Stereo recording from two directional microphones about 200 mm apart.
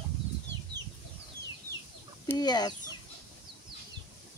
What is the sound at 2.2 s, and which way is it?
Speech, 20° left (ahead or behind).